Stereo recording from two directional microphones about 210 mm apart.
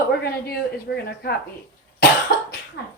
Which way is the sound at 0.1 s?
50° left (ahead or behind).